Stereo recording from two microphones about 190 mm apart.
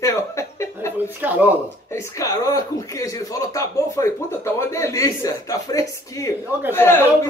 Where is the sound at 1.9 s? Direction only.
15° left (ahead or behind).